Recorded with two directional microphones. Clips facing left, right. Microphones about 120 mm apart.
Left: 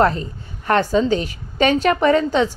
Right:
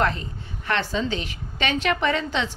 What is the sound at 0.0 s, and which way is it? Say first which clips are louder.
A woman's voice: left 7 dB; 40° left (ahead or behind).